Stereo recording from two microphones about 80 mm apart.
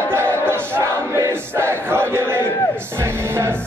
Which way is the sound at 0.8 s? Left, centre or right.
Right.